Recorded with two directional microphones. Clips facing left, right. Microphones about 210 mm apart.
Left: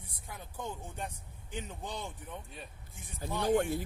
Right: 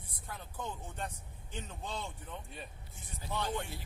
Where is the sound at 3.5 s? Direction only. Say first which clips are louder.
Left 11 dB; 50° left (ahead or behind).